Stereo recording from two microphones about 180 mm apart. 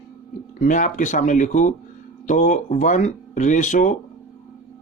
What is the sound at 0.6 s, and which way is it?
Speech, 45° left (ahead or behind).